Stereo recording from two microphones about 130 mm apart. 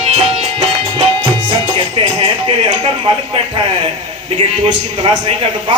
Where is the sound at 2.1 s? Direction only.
35° right (ahead or behind).